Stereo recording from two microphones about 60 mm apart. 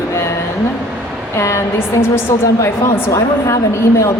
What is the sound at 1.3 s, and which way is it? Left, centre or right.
Speech, left.